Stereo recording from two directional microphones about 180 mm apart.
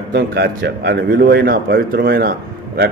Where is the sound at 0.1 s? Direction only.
65° right (ahead or behind).